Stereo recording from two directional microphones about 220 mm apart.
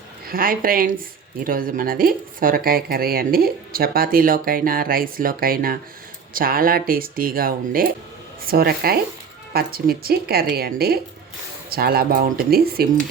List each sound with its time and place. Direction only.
0.3 s a woman's voice: 40° right (ahead or behind)